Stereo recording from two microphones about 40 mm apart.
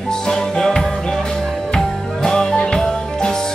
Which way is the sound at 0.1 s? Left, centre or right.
Centre.